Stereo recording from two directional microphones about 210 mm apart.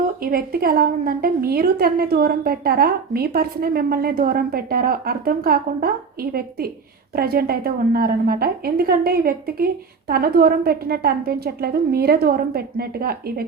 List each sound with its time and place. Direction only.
0.2 s a woman's voice: 45° right (ahead or behind)